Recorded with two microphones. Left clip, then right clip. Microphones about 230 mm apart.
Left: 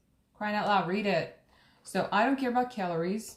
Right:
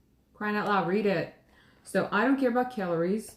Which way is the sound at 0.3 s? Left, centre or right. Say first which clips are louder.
Even; centre.